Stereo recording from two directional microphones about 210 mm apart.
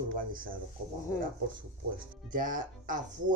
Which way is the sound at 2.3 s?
40° right (ahead or behind).